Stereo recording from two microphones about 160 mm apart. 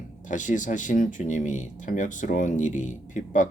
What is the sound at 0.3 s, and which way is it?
Speech, 50° left (ahead or behind).